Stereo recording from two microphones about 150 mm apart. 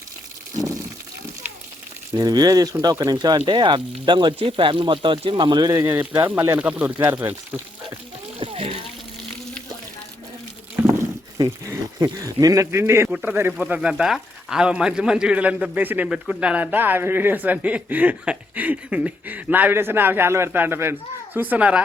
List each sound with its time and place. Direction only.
2.1 s speech: 25° right (ahead or behind)
6.1 s speech: 10° right (ahead or behind)
8.4 s splash: 40° right (ahead or behind)
10.8 s speech: 15° right (ahead or behind)